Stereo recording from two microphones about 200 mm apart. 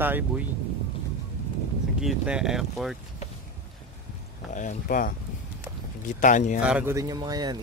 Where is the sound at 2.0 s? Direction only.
5° right (ahead or behind).